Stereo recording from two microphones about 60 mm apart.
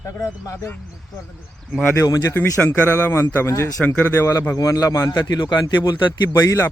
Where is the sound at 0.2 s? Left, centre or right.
Left.